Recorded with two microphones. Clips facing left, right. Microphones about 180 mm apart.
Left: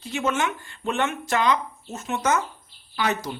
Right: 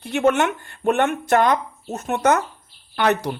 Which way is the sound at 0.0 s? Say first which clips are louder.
Right 7 dB; 60° right (ahead or behind).